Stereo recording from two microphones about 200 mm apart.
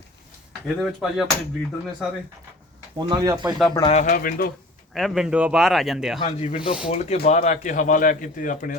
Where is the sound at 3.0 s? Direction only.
20° right (ahead or behind).